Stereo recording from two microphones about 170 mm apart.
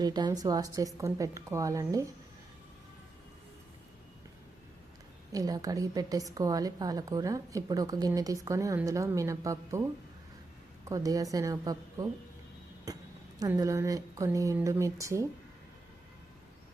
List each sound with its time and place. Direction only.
0.0 s a woman's voice: 25° right (ahead or behind)
5.3 s a woman's voice: 20° right (ahead or behind)
13.6 s a woman's voice: 20° right (ahead or behind)